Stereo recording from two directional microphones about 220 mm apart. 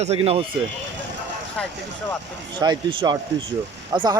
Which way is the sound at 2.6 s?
20° right (ahead or behind).